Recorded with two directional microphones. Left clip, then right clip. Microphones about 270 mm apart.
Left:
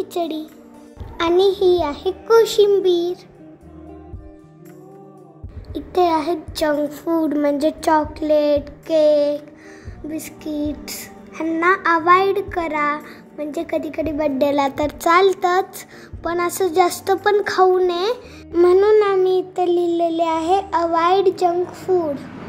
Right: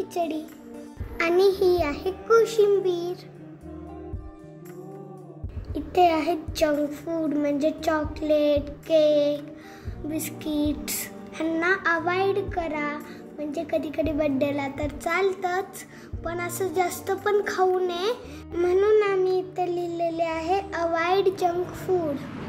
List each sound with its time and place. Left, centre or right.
0.1 s speech: centre
5.9 s speech: centre
6.9 s speech: centre
14.5 s a child's voice: left